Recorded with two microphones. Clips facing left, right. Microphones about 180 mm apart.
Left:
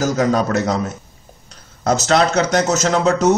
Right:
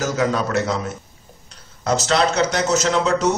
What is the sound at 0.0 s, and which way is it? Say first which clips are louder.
Speech: left 4 dB; 40° left (ahead or behind).